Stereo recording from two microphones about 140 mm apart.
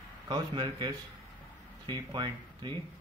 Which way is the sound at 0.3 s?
30° right (ahead or behind).